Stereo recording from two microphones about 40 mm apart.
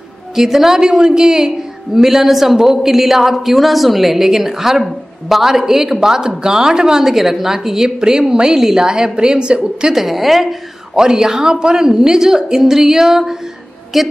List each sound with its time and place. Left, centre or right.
0.4 s a woman's voice: centre
9.9 s a woman's voice: centre
11.0 s a woman's voice: centre